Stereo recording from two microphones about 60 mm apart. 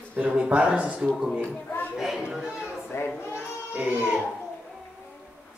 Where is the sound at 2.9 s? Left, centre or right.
Left.